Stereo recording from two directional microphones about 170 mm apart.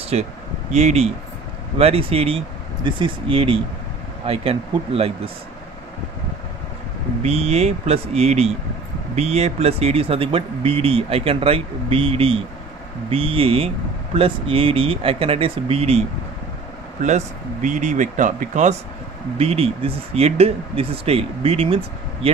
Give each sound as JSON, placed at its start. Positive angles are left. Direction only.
{"t": 0.1, "sound": "speech", "side_deg": -40}
{"t": 7.2, "sound": "speech", "side_deg": -40}
{"t": 17.0, "sound": "speech", "side_deg": -45}